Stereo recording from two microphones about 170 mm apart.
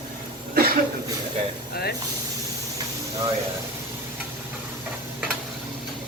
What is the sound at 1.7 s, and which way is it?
Speech, 65° left (ahead or behind).